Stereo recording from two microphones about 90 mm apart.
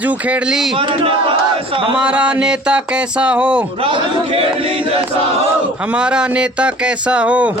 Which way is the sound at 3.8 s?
90° right.